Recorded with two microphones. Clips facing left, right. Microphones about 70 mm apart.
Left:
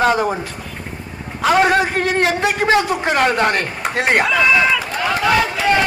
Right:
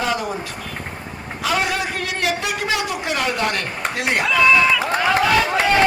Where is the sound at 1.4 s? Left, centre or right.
Left.